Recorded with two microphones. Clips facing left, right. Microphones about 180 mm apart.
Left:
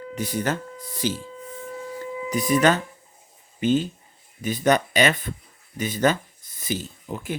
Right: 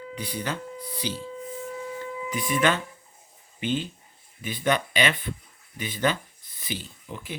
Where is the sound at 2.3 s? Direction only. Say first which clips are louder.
Left 5 dB; 40° left (ahead or behind).